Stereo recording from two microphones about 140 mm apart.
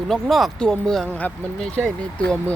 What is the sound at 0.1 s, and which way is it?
Speech, centre (ahead or behind).